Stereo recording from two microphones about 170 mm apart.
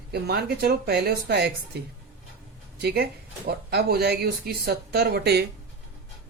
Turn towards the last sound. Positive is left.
turn(degrees=-70)  # may be behind; listen again after turning